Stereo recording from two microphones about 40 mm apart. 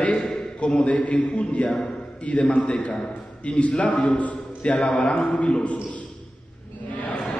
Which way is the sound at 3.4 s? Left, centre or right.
Left.